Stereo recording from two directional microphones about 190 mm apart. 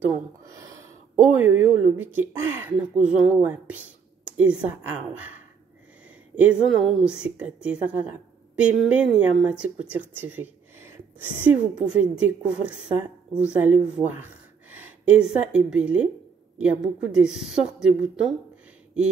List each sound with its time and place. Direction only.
0.0 s a sound: 15° right (ahead or behind)
1.2 s speech: 10° right (ahead or behind)
6.3 s a woman's voice: 5° right (ahead or behind)
17.1 s a woman's voice: 5° right (ahead or behind)